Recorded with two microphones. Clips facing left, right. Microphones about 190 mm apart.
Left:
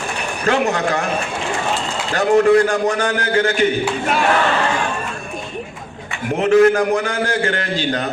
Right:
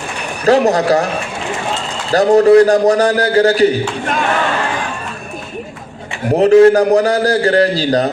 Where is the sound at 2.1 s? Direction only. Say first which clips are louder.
Right 5 dB; 35° right (ahead or behind).